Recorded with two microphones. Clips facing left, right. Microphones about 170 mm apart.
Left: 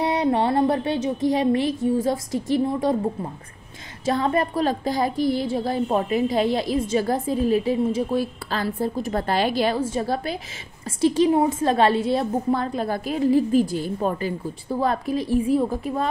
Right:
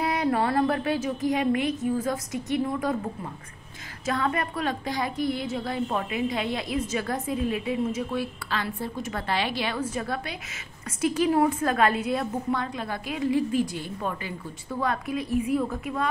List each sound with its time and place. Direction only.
0.0 s a sound: 25° left (ahead or behind)
2.5 s a woman's voice: 30° left (ahead or behind)
4.0 s a woman's voice: 30° left (ahead or behind)
9.8 s a woman's voice: 30° left (ahead or behind)